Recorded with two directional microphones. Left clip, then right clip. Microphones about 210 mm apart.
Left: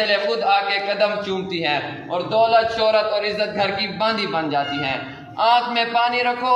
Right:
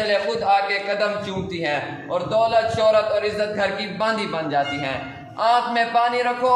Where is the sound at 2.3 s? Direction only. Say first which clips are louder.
Left 3 dB; 25° right (ahead or behind).